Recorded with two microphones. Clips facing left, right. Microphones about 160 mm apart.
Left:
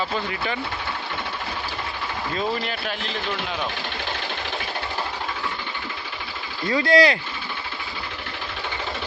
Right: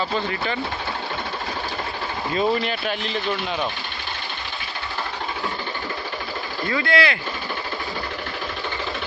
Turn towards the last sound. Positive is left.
turn(degrees=40)  # may be behind; listen again after turning